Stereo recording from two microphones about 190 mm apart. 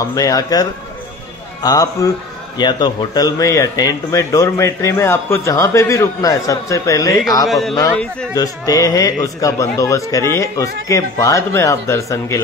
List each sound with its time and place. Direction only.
0.0 s speech: 20° left (ahead or behind)
7.4 s speech: centre (ahead or behind)
8.4 s speech: 20° left (ahead or behind)